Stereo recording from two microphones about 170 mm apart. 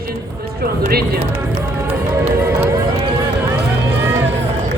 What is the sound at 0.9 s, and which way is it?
Speech, 65° right (ahead or behind).